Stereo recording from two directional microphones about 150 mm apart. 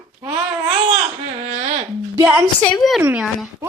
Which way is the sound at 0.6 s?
40° right (ahead or behind).